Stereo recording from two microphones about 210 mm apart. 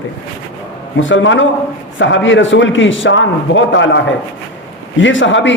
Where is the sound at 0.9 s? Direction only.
65° left (ahead or behind).